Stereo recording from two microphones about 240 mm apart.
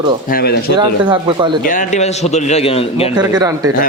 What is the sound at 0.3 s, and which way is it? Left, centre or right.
Speech, left.